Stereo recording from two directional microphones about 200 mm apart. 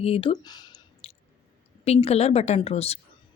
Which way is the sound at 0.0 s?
30° left (ahead or behind).